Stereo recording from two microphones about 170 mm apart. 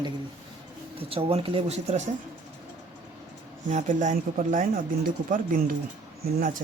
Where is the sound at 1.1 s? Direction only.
35° right (ahead or behind).